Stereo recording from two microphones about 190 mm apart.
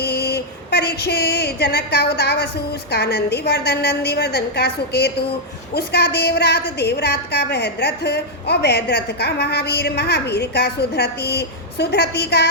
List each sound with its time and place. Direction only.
0.0 s a woman's voice: 60° left (ahead or behind)